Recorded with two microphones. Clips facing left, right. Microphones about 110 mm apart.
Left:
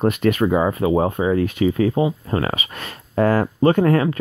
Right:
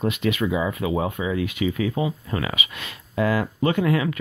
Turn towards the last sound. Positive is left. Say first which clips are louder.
# left 6 dB
turn(degrees=40)  # may be behind; listen again after turning